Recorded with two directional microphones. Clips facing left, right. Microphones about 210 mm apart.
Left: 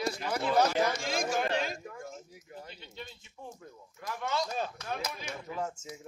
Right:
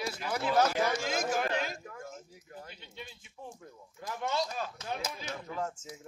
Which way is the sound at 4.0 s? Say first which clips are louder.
Even; 20° right (ahead or behind).